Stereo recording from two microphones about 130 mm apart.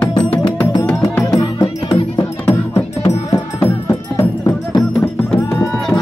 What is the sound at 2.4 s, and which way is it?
Music, 25° left (ahead or behind).